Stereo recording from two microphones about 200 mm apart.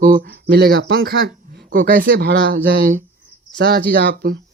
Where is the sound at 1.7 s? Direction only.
45° right (ahead or behind).